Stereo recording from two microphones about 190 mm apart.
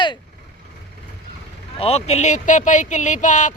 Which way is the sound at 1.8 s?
35° left (ahead or behind).